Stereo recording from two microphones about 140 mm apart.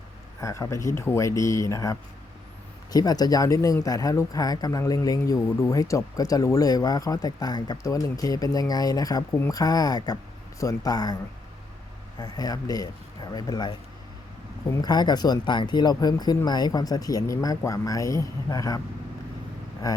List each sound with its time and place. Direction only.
0.4 s speech: 20° left (ahead or behind)
12.2 s speech: 25° left (ahead or behind)